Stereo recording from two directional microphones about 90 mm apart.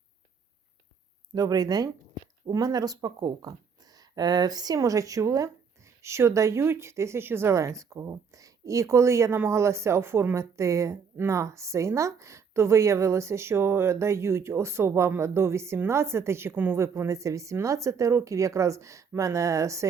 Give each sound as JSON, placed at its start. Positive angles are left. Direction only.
{"t": 1.3, "sound": "a woman's voice", "side_deg": -45}